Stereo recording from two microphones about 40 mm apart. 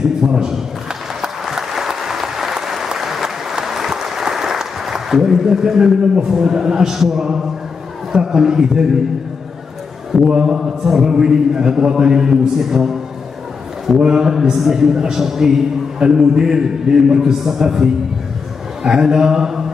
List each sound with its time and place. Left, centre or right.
0.2 s a man's voice: centre
1.2 s applause: centre
5.4 s a man's voice: centre
10.2 s a man's voice: centre
13.9 s a man's voice: centre
18.9 s a man's voice: centre